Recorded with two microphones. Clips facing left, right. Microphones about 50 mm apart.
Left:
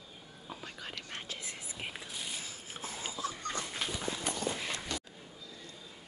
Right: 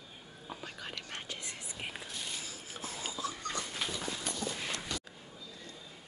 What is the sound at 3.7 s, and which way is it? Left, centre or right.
Dog, centre.